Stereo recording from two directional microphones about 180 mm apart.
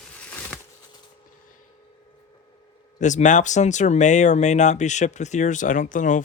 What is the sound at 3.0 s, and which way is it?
Speech, 45° left (ahead or behind).